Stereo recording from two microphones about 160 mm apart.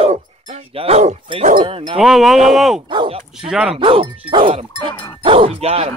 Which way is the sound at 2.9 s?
35° right (ahead or behind).